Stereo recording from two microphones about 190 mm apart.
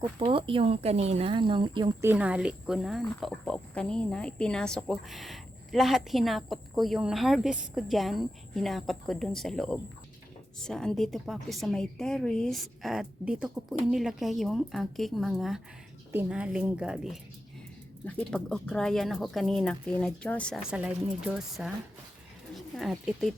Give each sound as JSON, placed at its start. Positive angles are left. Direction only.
{"t": 0.0, "sound": "speech", "side_deg": -25}
{"t": 2.0, "sound": "speech", "side_deg": -5}